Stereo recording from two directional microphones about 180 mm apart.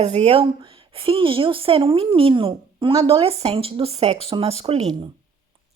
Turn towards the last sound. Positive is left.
turn(degrees=-35)  # may be behind; listen again after turning